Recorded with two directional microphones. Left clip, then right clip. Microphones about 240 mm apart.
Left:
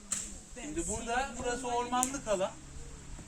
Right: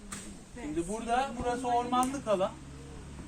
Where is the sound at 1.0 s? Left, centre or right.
Centre.